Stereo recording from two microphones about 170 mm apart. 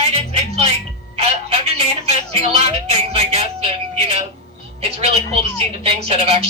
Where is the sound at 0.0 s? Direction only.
35° right (ahead or behind).